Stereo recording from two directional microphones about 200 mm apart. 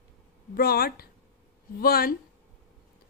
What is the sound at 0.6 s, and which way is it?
A woman's voice, 50° left (ahead or behind).